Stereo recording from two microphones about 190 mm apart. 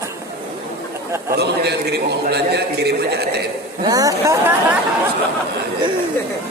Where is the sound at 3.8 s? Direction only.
20° right (ahead or behind).